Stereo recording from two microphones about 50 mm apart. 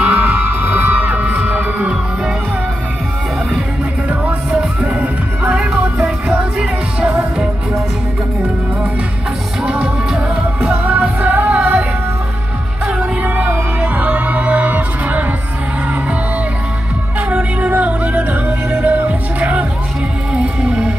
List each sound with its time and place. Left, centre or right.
0.0 s a sound: centre
0.6 s music: right
4.1 s music: right
9.6 s music: centre
13.2 s music: right
17.3 s music: right